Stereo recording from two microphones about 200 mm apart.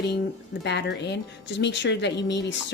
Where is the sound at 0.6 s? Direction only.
60° left (ahead or behind).